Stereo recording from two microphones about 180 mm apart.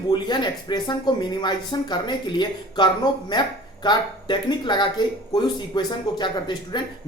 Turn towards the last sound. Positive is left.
turn(degrees=25)  # may be behind; listen again after turning